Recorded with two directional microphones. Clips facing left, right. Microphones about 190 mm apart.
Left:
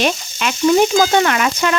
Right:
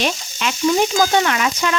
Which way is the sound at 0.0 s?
55° left (ahead or behind).